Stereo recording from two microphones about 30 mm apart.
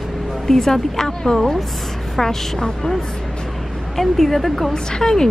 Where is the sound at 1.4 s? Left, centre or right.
Centre.